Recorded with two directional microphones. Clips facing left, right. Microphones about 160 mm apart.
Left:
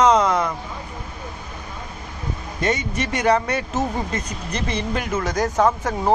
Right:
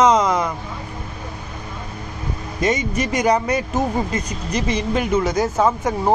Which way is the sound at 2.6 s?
10° right (ahead or behind).